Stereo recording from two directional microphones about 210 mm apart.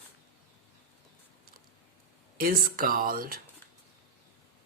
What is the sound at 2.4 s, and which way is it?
Speech, 45° right (ahead or behind).